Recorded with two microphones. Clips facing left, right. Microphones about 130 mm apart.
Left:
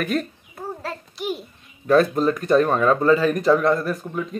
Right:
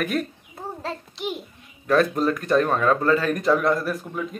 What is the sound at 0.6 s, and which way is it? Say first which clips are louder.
Child singing: left 1 dB; 25° right (ahead or behind).